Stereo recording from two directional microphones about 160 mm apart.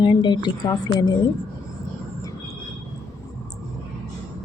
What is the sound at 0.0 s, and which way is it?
Speech, 30° left (ahead or behind).